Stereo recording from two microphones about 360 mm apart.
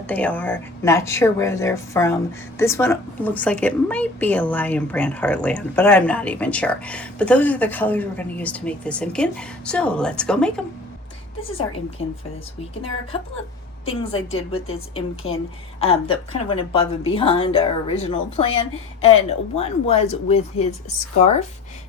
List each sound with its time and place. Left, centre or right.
0.1 s a woman's voice: centre
13.8 s speech: centre
14.9 s speech: left
15.8 s speech: centre